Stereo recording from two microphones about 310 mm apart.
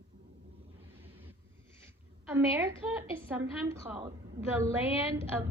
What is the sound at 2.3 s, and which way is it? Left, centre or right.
A woman's voice, centre.